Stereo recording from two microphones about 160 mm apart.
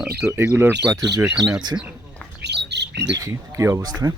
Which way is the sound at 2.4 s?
90° right.